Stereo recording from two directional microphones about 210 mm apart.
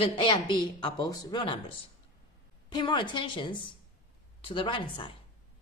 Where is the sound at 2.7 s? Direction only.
20° left (ahead or behind).